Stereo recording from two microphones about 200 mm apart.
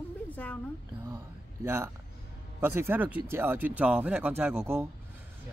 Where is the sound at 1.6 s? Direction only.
10° right (ahead or behind).